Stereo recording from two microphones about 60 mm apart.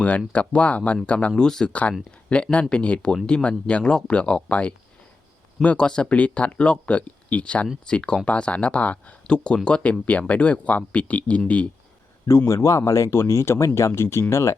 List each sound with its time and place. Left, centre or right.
0.3 s speech: left
1.7 s speech: left
12.6 s speech: left
13.1 s speech: left